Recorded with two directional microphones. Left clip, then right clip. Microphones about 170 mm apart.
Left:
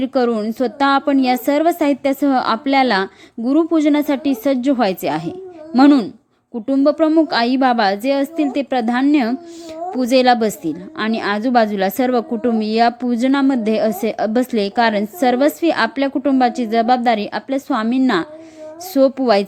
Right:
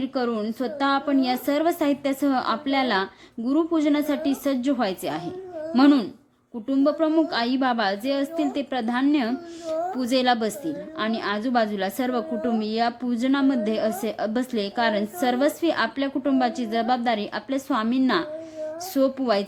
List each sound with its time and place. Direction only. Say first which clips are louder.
0.0 s a woman's voice: left 9 dB; 35° left (ahead or behind)